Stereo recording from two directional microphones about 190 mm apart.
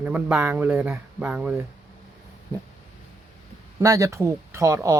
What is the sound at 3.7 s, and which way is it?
Speech, 15° right (ahead or behind).